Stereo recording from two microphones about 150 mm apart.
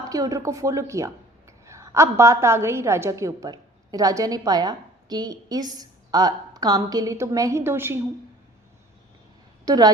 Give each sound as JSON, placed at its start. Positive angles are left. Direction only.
{"t": 0.1, "sound": "speech", "side_deg": -25}
{"t": 9.6, "sound": "a woman's voice", "side_deg": -25}